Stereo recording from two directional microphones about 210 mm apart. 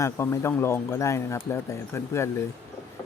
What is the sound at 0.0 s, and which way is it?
Speech, 10° left (ahead or behind).